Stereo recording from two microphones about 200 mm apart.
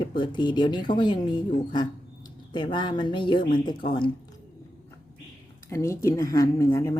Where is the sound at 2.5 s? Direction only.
25° left (ahead or behind).